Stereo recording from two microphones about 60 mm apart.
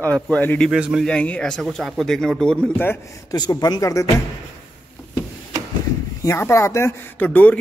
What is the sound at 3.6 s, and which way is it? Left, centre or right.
Speech, left.